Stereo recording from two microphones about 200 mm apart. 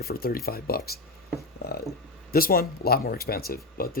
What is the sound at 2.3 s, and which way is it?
Speech, 50° left (ahead or behind).